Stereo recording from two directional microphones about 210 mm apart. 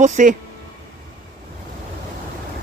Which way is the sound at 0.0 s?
35° right (ahead or behind).